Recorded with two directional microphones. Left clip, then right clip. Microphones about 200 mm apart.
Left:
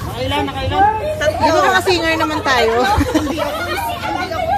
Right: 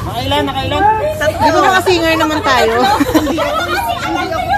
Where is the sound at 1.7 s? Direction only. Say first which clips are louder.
Right 3 dB; centre (ahead or behind).